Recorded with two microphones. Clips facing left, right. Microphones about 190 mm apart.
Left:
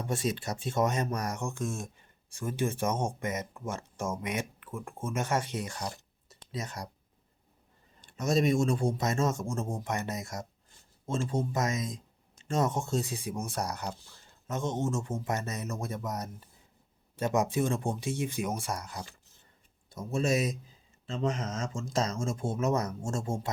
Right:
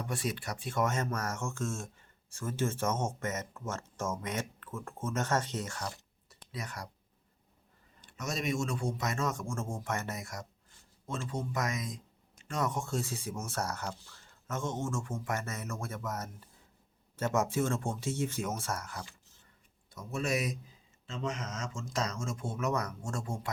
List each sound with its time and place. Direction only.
0.0 s speech: 25° left (ahead or behind)
8.0 s speech: 30° left (ahead or behind)
19.9 s speech: 30° left (ahead or behind)